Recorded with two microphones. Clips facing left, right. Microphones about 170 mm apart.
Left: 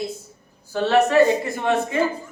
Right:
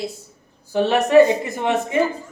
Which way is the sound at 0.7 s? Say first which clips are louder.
Even; 15° right (ahead or behind).